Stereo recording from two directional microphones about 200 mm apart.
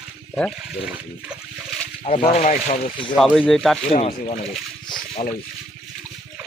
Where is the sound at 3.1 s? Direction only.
Centre (ahead or behind).